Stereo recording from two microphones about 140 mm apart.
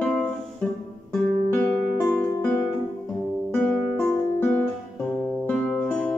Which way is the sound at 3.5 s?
10° left (ahead or behind).